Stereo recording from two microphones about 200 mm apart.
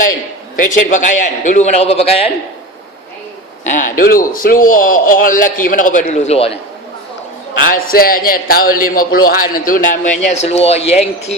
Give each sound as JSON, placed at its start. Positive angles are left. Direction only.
{"t": 0.5, "sound": "a man's voice", "side_deg": 40}
{"t": 3.6, "sound": "a man's voice", "side_deg": 40}
{"t": 7.7, "sound": "a man's voice", "side_deg": 45}